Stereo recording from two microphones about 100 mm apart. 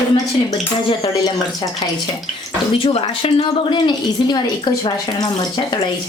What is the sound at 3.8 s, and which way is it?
Speech, 50° left (ahead or behind).